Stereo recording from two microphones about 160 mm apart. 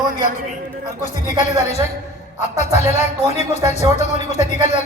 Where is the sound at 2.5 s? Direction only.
45° left (ahead or behind).